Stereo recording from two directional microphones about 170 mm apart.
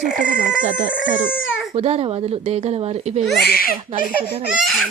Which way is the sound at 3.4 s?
60° left (ahead or behind).